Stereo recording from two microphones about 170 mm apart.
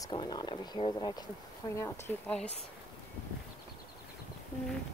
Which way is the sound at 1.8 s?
15° left (ahead or behind).